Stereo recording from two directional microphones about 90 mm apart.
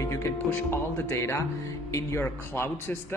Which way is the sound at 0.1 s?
30° left (ahead or behind).